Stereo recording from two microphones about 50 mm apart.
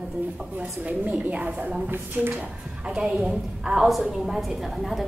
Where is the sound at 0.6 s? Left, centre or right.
Right.